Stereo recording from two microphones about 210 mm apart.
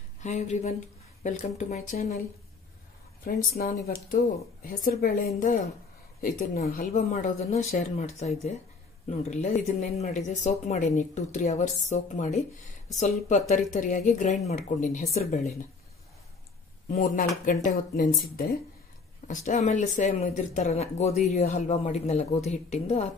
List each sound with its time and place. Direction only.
0.2 s speech: 35° left (ahead or behind)
3.3 s speech: 45° left (ahead or behind)
16.9 s speech: 45° left (ahead or behind)